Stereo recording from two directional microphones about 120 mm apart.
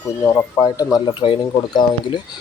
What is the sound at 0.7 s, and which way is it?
Speech, 30° left (ahead or behind).